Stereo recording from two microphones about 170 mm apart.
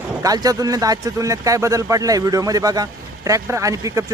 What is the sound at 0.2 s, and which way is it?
Speech, 20° right (ahead or behind).